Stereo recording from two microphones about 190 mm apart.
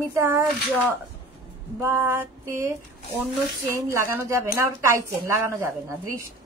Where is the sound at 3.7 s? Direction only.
15° right (ahead or behind).